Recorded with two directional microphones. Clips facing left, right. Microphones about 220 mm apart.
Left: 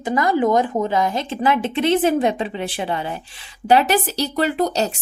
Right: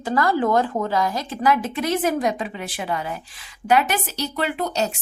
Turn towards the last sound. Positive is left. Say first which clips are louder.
# left 4 dB
turn(degrees=35)  # may be behind; listen again after turning